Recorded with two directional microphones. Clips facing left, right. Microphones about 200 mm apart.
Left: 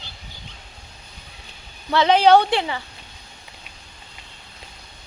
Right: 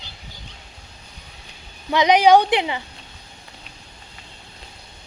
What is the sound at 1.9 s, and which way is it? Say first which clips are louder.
Speech: right 1 dB; 15° right (ahead or behind).